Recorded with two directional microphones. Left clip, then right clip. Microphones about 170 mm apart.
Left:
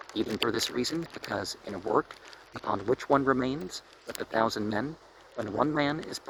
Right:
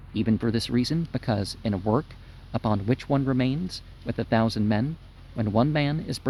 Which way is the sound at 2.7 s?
20° right (ahead or behind).